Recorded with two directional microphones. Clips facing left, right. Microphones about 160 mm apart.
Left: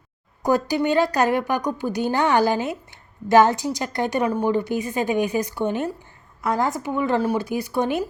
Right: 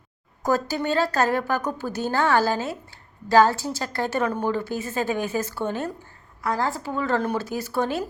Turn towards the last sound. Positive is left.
turn(degrees=15)  # may be behind; listen again after turning